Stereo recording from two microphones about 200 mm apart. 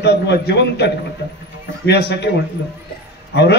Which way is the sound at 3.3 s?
60° left (ahead or behind).